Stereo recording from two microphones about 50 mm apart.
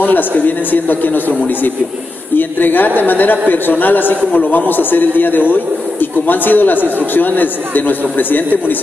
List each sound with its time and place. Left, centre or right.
0.0 s a man's voice: left